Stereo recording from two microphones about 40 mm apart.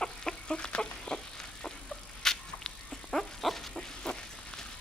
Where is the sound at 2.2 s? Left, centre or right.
Centre.